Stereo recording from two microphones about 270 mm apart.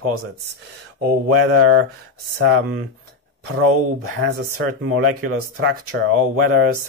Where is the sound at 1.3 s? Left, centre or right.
Right.